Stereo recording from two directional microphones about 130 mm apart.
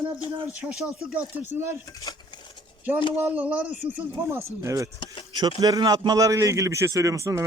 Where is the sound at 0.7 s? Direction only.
5° right (ahead or behind).